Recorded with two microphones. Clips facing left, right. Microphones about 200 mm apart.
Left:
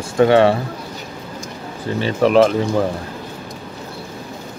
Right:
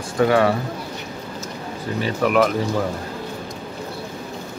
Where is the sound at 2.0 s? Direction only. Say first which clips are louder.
Left 5 dB; 30° left (ahead or behind).